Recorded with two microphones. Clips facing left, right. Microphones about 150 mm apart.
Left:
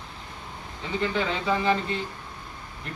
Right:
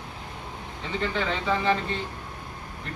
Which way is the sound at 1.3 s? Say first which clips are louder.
Right 2 dB; 10° left (ahead or behind).